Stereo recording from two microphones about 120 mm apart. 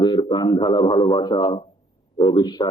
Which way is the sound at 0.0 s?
40° left (ahead or behind).